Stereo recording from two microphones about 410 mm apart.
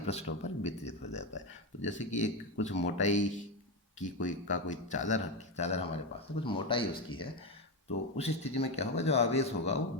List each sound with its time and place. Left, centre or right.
0.0 s speech: centre
1.8 s speech: left